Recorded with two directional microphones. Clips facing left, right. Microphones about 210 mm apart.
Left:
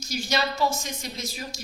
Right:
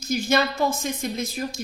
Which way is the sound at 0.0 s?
55° right (ahead or behind).